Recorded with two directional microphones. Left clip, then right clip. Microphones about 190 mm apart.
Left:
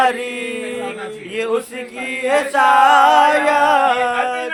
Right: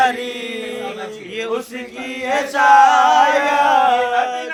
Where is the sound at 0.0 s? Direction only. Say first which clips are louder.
Even; 30° left (ahead or behind).